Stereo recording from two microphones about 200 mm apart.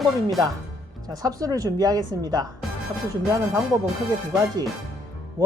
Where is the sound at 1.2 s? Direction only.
15° right (ahead or behind).